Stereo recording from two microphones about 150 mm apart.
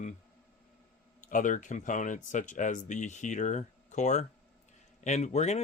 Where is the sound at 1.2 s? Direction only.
60° left (ahead or behind).